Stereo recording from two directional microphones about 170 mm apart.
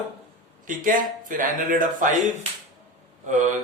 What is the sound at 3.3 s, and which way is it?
Speech, 45° right (ahead or behind).